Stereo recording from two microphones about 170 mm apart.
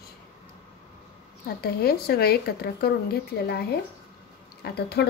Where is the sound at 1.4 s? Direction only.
65° left (ahead or behind).